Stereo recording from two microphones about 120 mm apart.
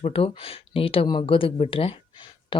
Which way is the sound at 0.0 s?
50° left (ahead or behind).